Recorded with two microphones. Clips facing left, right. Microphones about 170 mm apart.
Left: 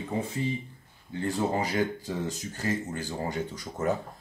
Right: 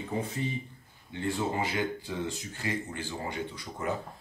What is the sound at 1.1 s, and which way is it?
Speech, 40° left (ahead or behind).